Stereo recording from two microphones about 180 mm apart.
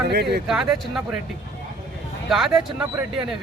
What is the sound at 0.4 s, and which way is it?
Speech, centre (ahead or behind).